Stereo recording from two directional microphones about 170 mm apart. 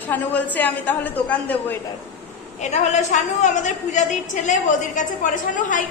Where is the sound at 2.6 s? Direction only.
45° left (ahead or behind).